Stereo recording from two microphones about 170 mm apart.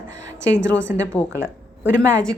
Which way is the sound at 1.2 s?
10° left (ahead or behind).